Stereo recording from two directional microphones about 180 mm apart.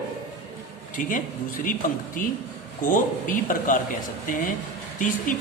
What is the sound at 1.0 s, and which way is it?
Speech, 45° left (ahead or behind).